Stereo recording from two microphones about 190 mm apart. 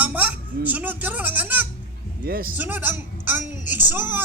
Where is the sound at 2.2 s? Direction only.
50° right (ahead or behind).